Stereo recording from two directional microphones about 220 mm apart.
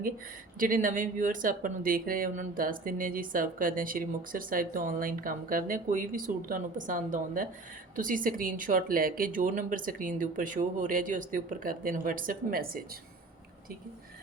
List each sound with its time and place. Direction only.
0.6 s speech: 35° right (ahead or behind)